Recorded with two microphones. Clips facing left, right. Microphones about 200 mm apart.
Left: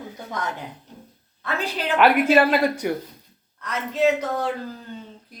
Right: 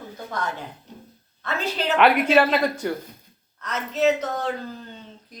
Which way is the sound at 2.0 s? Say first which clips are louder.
Left 1 dB; centre (ahead or behind).